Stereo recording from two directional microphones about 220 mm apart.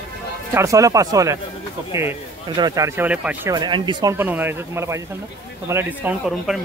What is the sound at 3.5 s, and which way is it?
Speech, 20° right (ahead or behind).